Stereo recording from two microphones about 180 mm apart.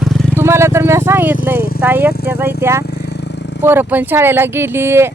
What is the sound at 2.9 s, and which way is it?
Vehicle, 65° left (ahead or behind).